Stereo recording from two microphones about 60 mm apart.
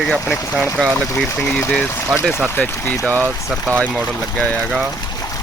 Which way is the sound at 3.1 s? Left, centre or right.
Right.